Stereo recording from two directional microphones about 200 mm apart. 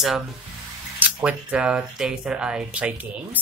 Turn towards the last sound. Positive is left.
turn(degrees=-5)  # may be behind; listen again after turning